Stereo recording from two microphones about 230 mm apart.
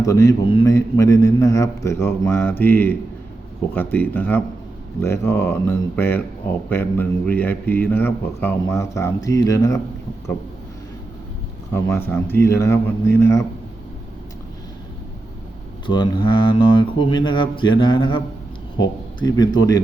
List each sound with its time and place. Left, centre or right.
0.0 s speech: centre
11.7 s speech: centre
15.9 s speech: left